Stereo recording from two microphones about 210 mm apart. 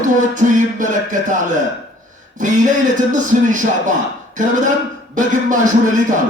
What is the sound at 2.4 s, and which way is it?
Speech, 35° right (ahead or behind).